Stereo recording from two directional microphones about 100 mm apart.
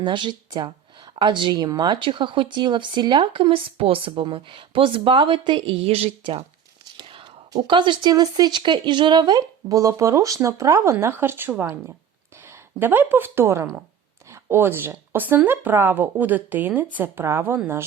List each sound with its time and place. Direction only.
0.0 s speech: 50° right (ahead or behind); by 6.4 s 80° right
6.9 s whispering: 60° right (ahead or behind)
7.7 s a woman's voice: 55° right (ahead or behind); by 17.6 s 25° right (ahead or behind)